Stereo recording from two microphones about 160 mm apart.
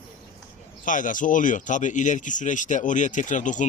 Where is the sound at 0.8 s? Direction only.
55° left (ahead or behind).